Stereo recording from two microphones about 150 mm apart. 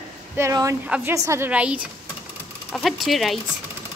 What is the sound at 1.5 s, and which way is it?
A woman's voice, 10° right (ahead or behind).